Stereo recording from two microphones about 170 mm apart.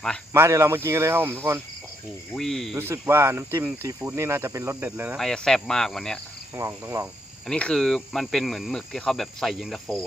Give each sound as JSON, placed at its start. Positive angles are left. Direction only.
{"t": 0.3, "sound": "speech", "side_deg": -15}
{"t": 2.3, "sound": "speech", "side_deg": 5}
{"t": 2.7, "sound": "speech", "side_deg": -15}
{"t": 5.1, "sound": "speech", "side_deg": 5}
{"t": 6.6, "sound": "speech", "side_deg": -15}
{"t": 7.4, "sound": "speech", "side_deg": 5}